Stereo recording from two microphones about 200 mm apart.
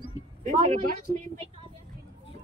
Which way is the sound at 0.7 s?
40° right (ahead or behind).